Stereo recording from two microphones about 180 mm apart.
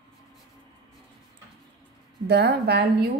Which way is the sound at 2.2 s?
65° right (ahead or behind).